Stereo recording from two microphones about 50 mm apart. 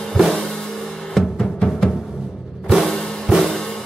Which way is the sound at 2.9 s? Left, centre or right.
Centre.